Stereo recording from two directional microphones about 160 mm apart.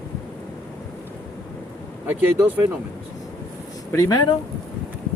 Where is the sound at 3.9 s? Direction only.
20° left (ahead or behind).